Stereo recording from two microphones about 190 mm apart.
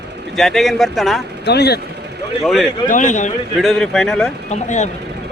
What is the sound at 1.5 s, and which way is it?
Speech, 60° left (ahead or behind).